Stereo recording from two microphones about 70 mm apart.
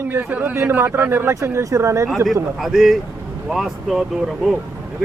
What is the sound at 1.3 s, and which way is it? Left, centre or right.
Speech, right.